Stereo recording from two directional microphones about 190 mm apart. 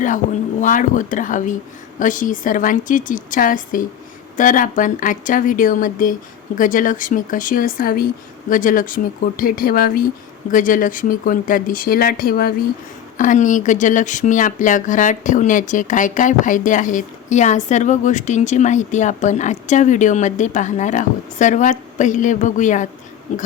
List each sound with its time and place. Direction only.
0.0 s speech: 40° left (ahead or behind)